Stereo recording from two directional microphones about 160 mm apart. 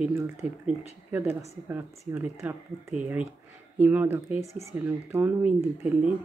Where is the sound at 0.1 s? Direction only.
15° right (ahead or behind).